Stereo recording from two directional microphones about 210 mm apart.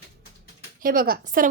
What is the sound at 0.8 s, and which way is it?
Speech, 45° right (ahead or behind).